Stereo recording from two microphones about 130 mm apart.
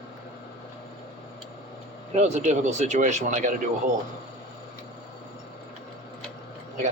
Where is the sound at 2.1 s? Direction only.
60° right (ahead or behind); by 3.5 s 80° right.